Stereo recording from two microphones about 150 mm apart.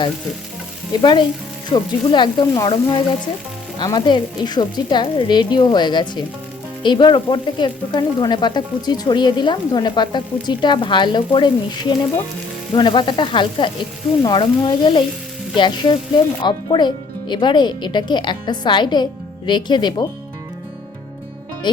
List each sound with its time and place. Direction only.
0.9 s speech: 30° left (ahead or behind)